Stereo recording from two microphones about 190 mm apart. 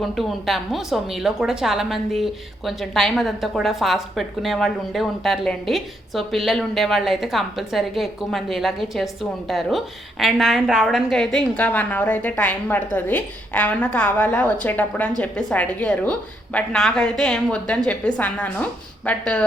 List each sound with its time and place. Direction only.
0.0 s a woman's voice: centre (ahead or behind)